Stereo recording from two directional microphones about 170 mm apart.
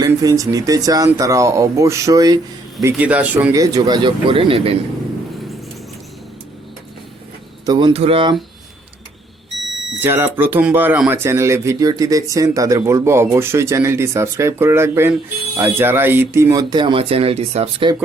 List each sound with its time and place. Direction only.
0.0 s speech: 20° right (ahead or behind)
2.9 s speech: 10° right (ahead or behind)
3.5 s speech: 20° right (ahead or behind)
7.6 s speech: 25° right (ahead or behind)
10.0 s speech: 15° right (ahead or behind); by 17.9 s 35° right (ahead or behind)